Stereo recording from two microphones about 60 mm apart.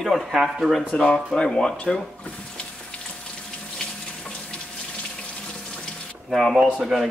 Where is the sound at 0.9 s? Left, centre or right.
Centre.